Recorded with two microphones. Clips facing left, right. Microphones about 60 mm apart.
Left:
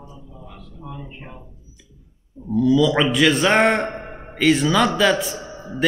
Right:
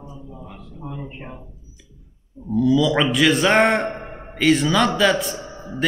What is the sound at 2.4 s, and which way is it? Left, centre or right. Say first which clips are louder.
A man's voice: left 1 dB; centre.